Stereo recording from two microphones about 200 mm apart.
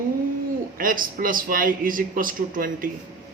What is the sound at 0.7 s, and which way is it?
Speech, 45° right (ahead or behind).